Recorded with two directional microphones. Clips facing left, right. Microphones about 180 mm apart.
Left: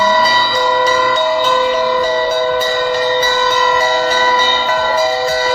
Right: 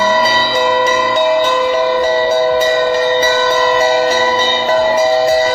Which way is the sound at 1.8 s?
25° right (ahead or behind).